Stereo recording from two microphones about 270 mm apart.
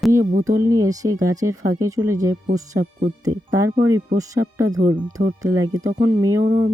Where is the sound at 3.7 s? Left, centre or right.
Right.